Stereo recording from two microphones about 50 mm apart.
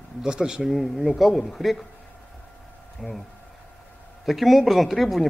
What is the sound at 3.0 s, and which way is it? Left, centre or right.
Speech, centre.